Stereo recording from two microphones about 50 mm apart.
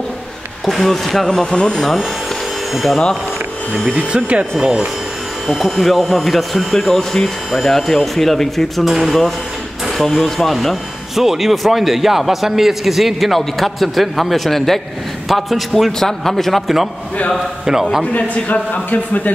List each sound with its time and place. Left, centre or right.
0.7 s speech: centre
1.4 s speech: centre
2.7 s speech: centre
3.8 s speech: centre
5.5 s speech: centre
18.1 s speech: left